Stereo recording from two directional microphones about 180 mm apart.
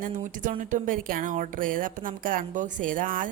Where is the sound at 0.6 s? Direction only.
45° right (ahead or behind).